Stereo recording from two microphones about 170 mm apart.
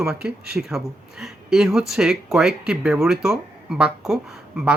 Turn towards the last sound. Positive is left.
turn(degrees=-5)  # may be behind; listen again after turning